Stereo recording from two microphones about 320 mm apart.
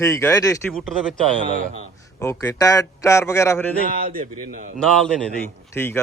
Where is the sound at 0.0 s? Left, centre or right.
Centre.